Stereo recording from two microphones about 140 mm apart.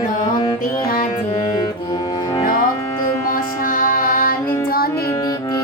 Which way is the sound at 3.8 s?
80° left.